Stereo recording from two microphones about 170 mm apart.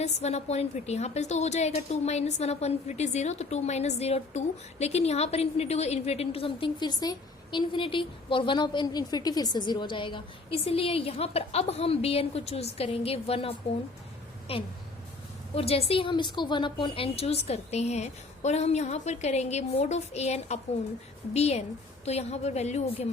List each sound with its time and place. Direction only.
0.0 s a woman's voice: 40° left (ahead or behind)
14.5 s a woman's voice: 35° left (ahead or behind)